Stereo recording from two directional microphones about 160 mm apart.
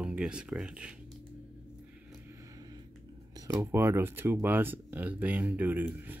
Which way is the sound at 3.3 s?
20° right (ahead or behind).